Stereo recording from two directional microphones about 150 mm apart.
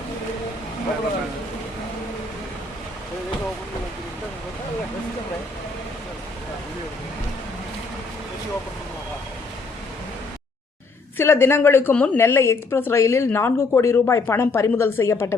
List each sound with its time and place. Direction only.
11.2 s a woman's voice: 15° left (ahead or behind)